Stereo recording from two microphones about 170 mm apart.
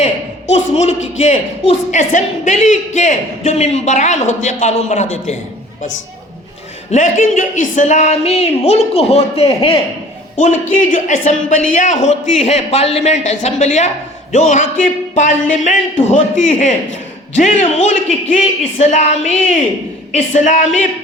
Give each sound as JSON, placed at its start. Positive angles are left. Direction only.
{"t": 0.0, "sound": "a sound", "side_deg": 40}
{"t": 1.2, "sound": "a woman's voice", "side_deg": 45}
{"t": 6.9, "sound": "speech", "side_deg": 45}
{"t": 10.3, "sound": "a woman's voice", "side_deg": 45}